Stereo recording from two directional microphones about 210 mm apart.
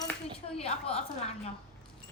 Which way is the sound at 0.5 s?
30° left (ahead or behind).